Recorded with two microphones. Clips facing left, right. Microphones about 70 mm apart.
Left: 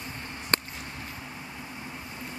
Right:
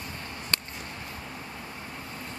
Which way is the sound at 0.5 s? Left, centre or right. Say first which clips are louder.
Left 5 dB; left.